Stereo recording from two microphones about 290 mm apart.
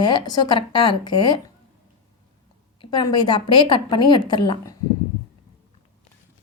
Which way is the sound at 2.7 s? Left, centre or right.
Centre.